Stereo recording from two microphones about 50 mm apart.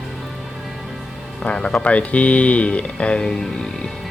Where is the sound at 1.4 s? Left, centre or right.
Centre.